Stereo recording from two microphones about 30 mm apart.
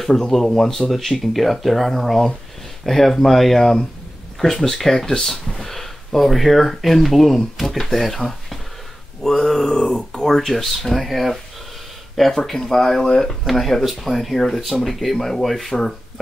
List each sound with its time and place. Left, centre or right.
0.3 s speech: centre
9.2 s speech: centre
9.8 s speech: left
10.2 s speech: centre
13.0 s speech: centre
13.5 s speech: centre
15.1 s speech: centre